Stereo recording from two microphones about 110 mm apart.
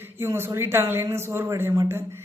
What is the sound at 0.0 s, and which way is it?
Speech, 20° right (ahead or behind).